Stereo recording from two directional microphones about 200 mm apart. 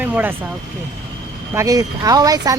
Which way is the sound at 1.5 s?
15° right (ahead or behind).